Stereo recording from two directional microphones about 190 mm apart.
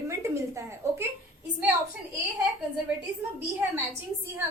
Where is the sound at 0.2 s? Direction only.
15° right (ahead or behind).